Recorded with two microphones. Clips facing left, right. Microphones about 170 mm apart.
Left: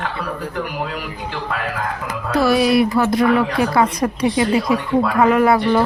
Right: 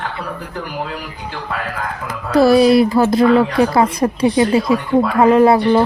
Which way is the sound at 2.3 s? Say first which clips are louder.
Right 5 dB; 35° right (ahead or behind).